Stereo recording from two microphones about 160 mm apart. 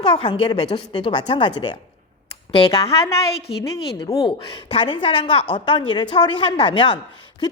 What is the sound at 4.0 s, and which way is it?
A woman's voice, 30° left (ahead or behind).